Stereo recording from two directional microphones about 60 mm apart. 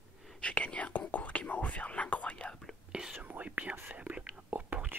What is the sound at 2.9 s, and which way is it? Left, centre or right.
Whispering, centre.